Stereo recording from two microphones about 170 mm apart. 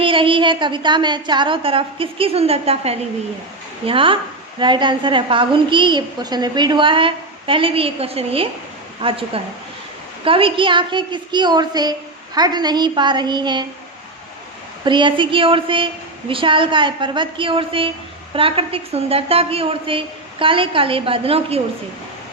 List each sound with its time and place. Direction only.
0.0 s a woman's voice: 30° right (ahead or behind)
14.8 s a woman's voice: 30° right (ahead or behind)